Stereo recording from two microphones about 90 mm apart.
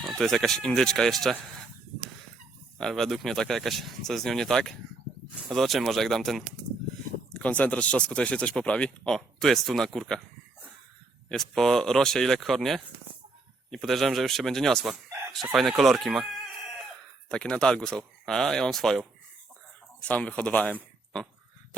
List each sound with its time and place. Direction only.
0.2 s speech: 5° left (ahead or behind)
2.7 s speech: 5° left (ahead or behind)
7.3 s speech: 15° left (ahead or behind)
11.3 s speech: 5° left (ahead or behind)
17.2 s speech: 10° left (ahead or behind)
20.1 s speech: 15° left (ahead or behind)